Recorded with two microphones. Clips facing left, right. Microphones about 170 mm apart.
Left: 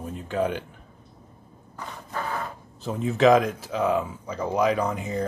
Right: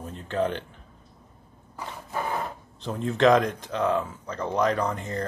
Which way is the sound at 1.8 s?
10° right (ahead or behind).